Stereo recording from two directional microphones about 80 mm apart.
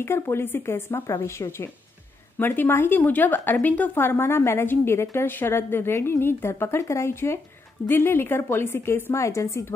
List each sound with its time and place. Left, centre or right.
0.0 s a woman's voice: left
9.1 s a woman's voice: left